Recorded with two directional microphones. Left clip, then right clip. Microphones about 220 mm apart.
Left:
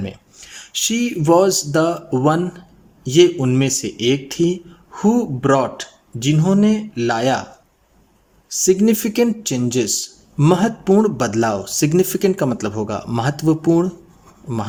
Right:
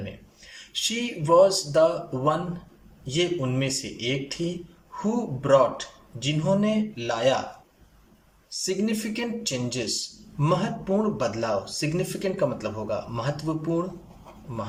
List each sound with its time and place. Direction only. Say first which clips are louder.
0.0 s speech: left 8 dB; 55° left (ahead or behind)
8.4 s speech: left 12 dB; 55° left (ahead or behind)